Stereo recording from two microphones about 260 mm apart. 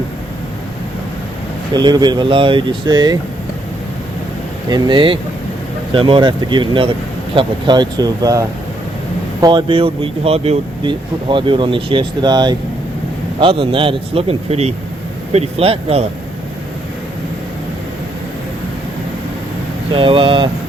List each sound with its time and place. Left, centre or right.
1.7 s speech: centre
4.7 s speech: centre
19.9 s speech: centre